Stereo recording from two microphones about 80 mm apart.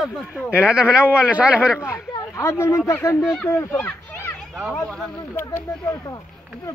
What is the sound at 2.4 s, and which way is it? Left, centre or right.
Speech, left.